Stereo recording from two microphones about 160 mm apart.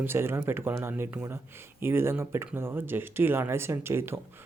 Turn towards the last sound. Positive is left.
turn(degrees=-15)  # may be behind; listen again after turning